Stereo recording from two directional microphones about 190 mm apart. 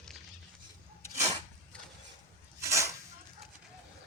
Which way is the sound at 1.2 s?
30° right (ahead or behind).